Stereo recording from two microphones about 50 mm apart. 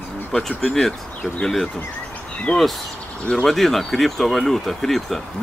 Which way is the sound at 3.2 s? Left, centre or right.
Centre.